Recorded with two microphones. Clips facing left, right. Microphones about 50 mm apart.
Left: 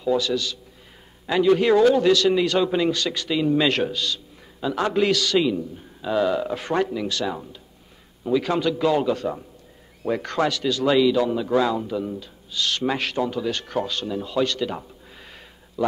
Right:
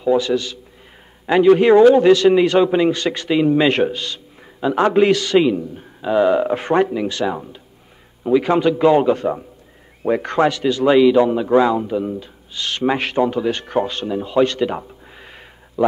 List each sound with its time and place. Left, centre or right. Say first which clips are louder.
0.0 s a man's voice: right 5 dB; right